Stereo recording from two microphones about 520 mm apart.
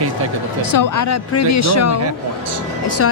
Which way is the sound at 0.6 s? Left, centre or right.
Left.